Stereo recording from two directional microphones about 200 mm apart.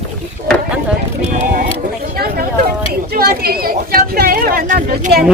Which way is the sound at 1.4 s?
50° right (ahead or behind).